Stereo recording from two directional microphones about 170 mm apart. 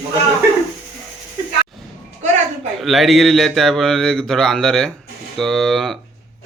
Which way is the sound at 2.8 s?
Centre (ahead or behind).